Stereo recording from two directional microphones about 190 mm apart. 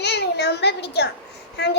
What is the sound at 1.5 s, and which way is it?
Speech, 60° left (ahead or behind).